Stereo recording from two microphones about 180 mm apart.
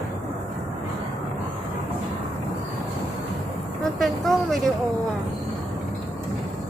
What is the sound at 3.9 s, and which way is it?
Speech, centre (ahead or behind).